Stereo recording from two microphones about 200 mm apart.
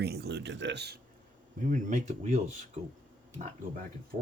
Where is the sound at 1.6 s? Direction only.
40° right (ahead or behind).